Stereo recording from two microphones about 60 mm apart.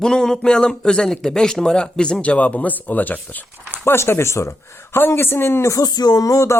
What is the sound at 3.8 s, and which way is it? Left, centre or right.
Speech, left.